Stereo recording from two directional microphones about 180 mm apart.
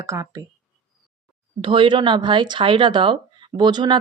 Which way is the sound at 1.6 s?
30° right (ahead or behind).